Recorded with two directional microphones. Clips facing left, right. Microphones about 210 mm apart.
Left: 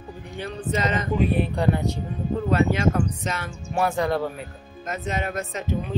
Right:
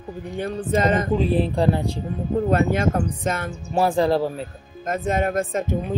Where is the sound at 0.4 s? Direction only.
50° right (ahead or behind).